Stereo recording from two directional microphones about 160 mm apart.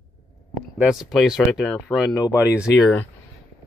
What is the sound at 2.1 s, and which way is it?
Speech, 20° left (ahead or behind).